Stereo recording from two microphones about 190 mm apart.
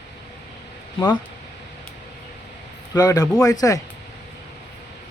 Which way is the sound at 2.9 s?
20° left (ahead or behind).